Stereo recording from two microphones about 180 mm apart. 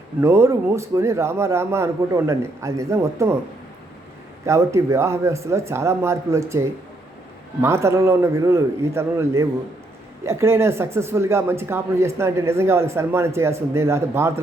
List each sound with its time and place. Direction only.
0.2 s speech: 15° right (ahead or behind)
4.4 s speech: 15° right (ahead or behind)